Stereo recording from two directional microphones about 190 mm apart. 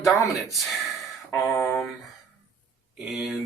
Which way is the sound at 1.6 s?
5° left (ahead or behind).